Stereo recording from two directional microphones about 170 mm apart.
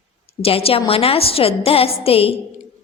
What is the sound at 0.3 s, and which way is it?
A woman's voice, 35° left (ahead or behind).